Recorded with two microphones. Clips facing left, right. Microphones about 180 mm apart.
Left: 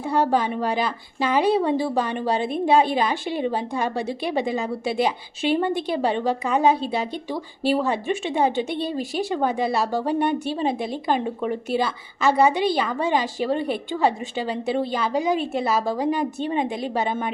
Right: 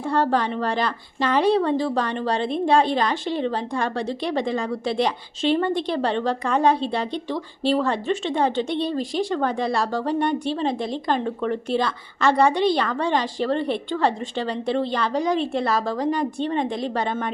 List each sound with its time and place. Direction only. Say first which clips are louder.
0.0 s a woman's voice: even; 5° left (ahead or behind)